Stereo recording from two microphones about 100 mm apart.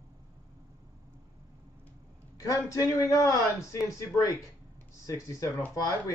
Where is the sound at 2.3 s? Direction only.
35° left (ahead or behind).